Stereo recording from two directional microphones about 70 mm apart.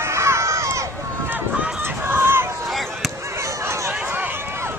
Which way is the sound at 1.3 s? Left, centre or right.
Centre.